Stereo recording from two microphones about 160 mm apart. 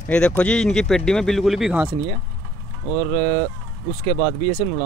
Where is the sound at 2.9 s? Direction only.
40° right (ahead or behind).